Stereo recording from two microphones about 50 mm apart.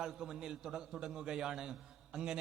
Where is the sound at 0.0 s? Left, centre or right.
Centre.